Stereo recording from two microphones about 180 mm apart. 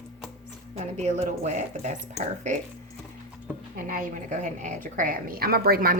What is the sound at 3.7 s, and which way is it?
A woman's voice, 50° right (ahead or behind).